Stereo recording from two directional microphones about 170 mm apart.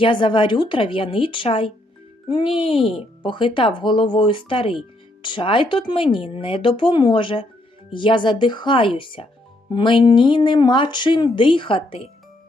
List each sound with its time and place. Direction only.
0.0 s speech: 30° left (ahead or behind)